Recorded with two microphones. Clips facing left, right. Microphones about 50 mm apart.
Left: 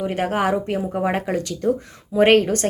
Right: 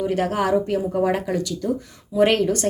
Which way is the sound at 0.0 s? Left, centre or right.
Left.